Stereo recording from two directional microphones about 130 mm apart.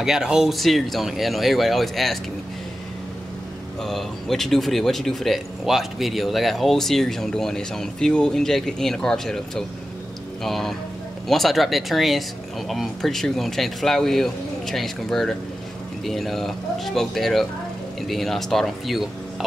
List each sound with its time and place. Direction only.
0.0 s speech: 5° right (ahead or behind)
3.8 s speech: centre (ahead or behind)